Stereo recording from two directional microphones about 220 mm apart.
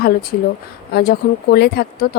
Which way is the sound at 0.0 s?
40° left (ahead or behind).